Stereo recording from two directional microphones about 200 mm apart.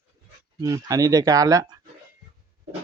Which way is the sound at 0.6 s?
15° right (ahead or behind).